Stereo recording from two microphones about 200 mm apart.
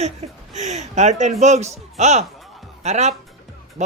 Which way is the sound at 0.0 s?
35° right (ahead or behind).